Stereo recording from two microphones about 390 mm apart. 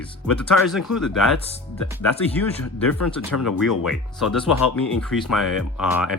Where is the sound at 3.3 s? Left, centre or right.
Left.